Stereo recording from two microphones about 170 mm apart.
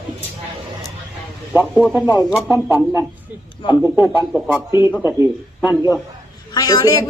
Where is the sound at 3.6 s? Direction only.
30° left (ahead or behind).